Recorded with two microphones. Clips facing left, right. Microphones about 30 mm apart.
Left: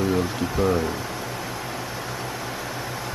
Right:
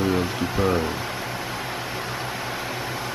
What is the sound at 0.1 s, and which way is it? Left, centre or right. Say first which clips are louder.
Speech: even; centre.